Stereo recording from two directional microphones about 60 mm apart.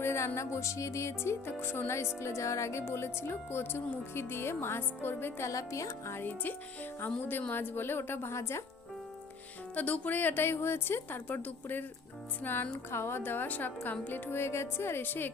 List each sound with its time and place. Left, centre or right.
0.0 s music: left
0.3 s music: left
2.8 s speech: left
5.5 s speech: left
6.1 s speech: left
9.7 s speech: left
14.3 s speech: left